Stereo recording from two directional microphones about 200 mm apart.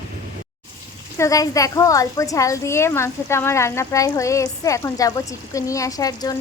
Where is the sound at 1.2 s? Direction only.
15° left (ahead or behind).